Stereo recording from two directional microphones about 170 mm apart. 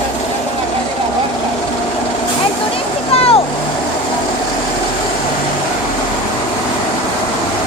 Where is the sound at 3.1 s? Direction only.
35° left (ahead or behind).